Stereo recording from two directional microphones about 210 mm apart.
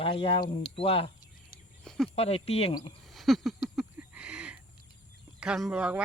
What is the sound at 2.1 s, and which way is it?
Speech, 30° left (ahead or behind).